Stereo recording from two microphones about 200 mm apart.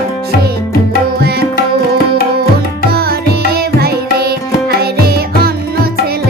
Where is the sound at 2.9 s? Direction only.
50° right (ahead or behind).